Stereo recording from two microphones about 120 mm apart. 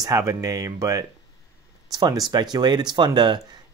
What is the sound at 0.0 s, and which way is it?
Speech, 25° right (ahead or behind).